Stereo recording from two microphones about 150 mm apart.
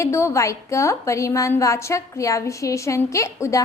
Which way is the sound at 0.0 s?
20° left (ahead or behind).